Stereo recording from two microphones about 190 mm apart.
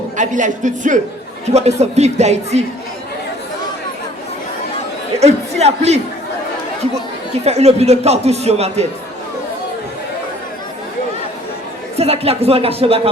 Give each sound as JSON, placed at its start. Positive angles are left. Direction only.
{"t": 0.2, "sound": "speech", "side_deg": -40}
{"t": 5.2, "sound": "speech", "side_deg": -35}
{"t": 7.4, "sound": "speech", "side_deg": -35}
{"t": 11.9, "sound": "speech", "side_deg": -30}